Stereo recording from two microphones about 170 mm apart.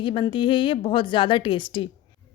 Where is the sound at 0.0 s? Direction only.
30° left (ahead or behind).